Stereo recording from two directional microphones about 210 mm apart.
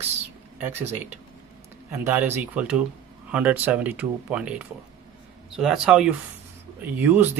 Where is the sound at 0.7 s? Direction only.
30° right (ahead or behind).